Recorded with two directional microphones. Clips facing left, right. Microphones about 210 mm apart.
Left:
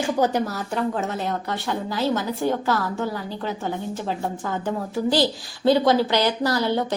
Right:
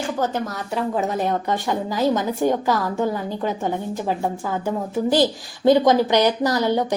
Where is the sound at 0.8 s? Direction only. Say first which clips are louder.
Right 3 dB; 10° right (ahead or behind).